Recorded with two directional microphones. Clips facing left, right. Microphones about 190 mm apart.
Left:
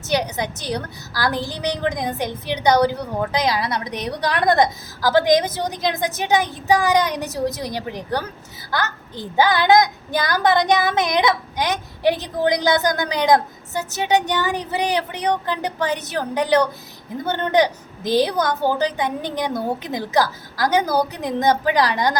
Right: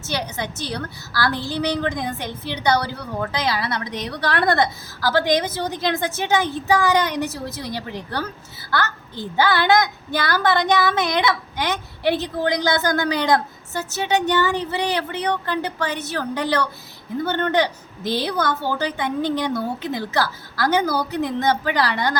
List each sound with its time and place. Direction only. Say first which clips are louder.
0.0 s a woman's voice: left 5 dB; 15° left (ahead or behind)